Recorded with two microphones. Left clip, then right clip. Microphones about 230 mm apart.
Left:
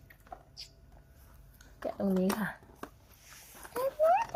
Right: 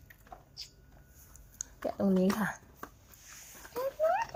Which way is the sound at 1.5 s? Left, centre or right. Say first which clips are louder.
Right 2 dB; centre.